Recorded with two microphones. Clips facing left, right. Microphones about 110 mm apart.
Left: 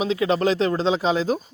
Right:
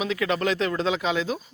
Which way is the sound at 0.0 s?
30° left (ahead or behind).